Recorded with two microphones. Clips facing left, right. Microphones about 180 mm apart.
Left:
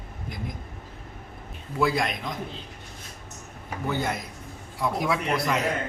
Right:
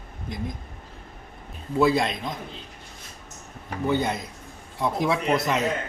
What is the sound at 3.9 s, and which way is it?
Speech, 20° right (ahead or behind).